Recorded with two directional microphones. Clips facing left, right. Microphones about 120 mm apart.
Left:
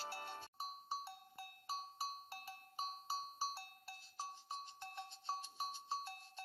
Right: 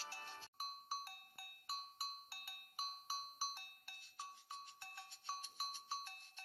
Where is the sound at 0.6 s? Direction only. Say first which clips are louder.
Left 1 dB; 25° left (ahead or behind).